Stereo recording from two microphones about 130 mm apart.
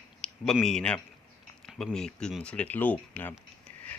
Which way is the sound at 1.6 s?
5° left (ahead or behind).